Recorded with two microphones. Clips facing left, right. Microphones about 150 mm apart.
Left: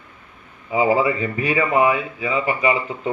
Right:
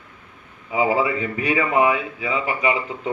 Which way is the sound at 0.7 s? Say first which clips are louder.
Left 2 dB; 15° right (ahead or behind).